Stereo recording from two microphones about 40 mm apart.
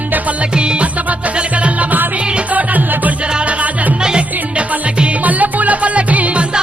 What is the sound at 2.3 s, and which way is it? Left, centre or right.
Music, right.